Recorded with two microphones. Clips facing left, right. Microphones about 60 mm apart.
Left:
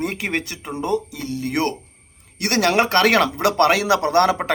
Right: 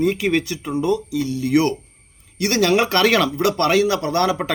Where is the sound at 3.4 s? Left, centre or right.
Left.